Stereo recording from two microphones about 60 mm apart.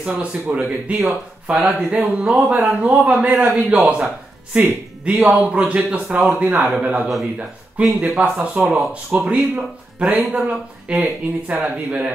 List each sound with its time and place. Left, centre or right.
0.0 s a man's voice: right
2.4 s speech: centre
2.8 s a man's voice: right